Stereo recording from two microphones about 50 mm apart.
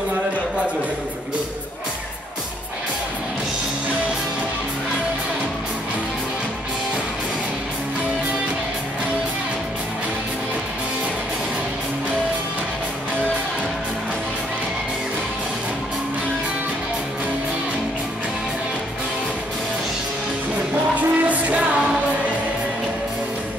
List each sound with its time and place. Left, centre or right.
21.0 s music: right